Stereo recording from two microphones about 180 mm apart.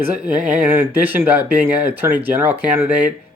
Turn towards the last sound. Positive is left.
turn(degrees=-10)  # may be behind; listen again after turning